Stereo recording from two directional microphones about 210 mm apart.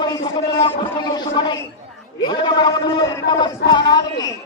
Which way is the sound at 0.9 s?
20° left (ahead or behind).